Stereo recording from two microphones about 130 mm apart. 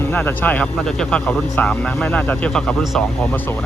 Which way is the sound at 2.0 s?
5° left (ahead or behind).